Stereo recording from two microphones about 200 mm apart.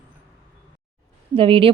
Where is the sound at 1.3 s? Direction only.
25° right (ahead or behind).